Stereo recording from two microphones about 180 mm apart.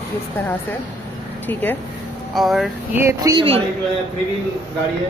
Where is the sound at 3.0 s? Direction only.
15° right (ahead or behind).